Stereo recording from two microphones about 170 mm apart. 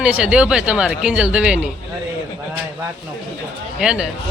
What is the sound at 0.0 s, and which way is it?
Speech, 5° right (ahead or behind).